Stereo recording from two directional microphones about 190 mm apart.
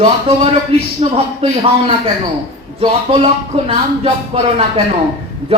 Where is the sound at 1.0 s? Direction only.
35° right (ahead or behind).